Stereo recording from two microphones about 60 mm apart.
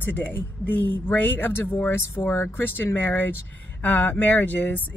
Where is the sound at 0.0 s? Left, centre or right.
Left.